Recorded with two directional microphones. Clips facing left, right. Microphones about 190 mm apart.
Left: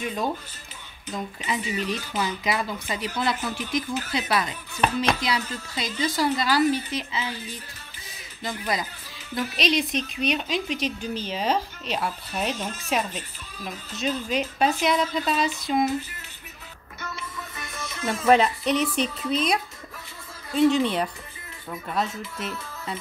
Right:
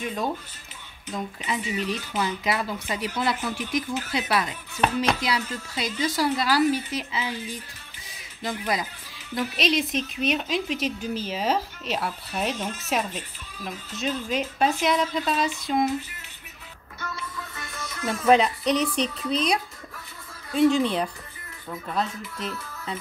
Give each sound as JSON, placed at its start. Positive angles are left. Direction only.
{"t": 0.0, "sound": "a woman's voice", "side_deg": 0}
{"t": 17.0, "sound": "music", "side_deg": 20}
{"t": 18.2, "sound": "speech", "side_deg": 5}